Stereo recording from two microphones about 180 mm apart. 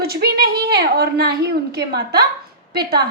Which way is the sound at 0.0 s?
60° right (ahead or behind).